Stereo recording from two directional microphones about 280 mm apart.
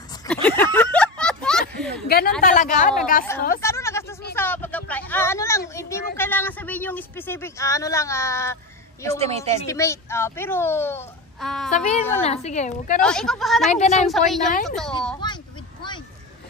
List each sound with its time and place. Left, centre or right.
0.3 s a sound: centre
2.0 s a woman's voice: left
3.6 s a sound: centre
6.1 s speech: centre
9.2 s a woman's voice: right
9.7 s speech: centre
11.7 s a woman's voice: left
13.0 s speech: centre
13.7 s a woman's voice: left
14.0 s speech: centre
14.5 s a woman's voice: left